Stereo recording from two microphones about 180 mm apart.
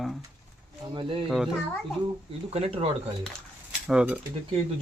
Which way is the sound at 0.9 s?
30° right (ahead or behind).